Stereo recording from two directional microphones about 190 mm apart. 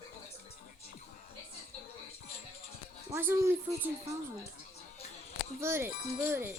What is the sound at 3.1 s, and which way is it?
Speech, 15° right (ahead or behind).